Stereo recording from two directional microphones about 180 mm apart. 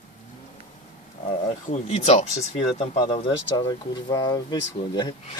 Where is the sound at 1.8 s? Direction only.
35° left (ahead or behind).